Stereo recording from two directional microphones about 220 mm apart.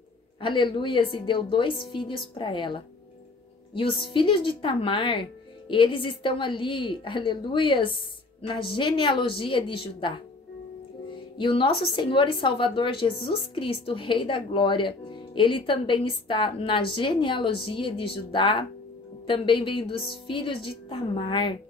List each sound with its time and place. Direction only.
0.4 s speech: 20° left (ahead or behind)
11.3 s speech: 20° left (ahead or behind)